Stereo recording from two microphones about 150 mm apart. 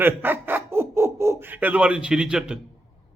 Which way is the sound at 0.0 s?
15° right (ahead or behind).